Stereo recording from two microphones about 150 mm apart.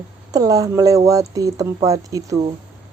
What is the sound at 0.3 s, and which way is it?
Speech, 25° right (ahead or behind).